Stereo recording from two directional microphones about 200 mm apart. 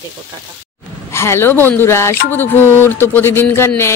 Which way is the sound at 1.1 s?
15° left (ahead or behind).